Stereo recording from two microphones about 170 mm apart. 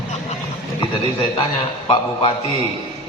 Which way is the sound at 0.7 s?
30° left (ahead or behind).